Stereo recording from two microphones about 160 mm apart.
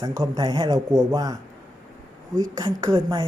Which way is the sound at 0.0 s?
25° right (ahead or behind).